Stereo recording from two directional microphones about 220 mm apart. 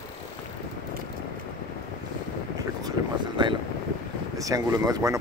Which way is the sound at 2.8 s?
20° right (ahead or behind).